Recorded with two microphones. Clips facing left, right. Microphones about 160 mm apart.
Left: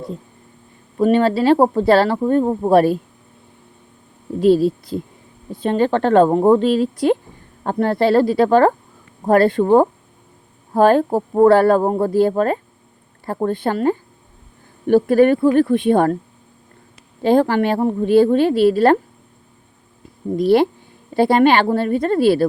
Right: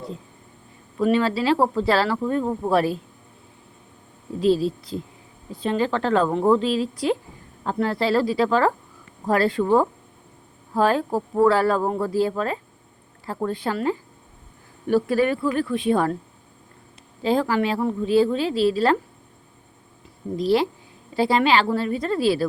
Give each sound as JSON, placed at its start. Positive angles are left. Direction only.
{"t": 0.9, "sound": "speech", "side_deg": 45}
{"t": 2.1, "sound": "speech", "side_deg": 40}
{"t": 2.6, "sound": "speech", "side_deg": 55}
{"t": 4.4, "sound": "a woman's voice", "side_deg": 55}
{"t": 17.2, "sound": "a woman's voice", "side_deg": 55}
{"t": 20.3, "sound": "a woman's voice", "side_deg": 55}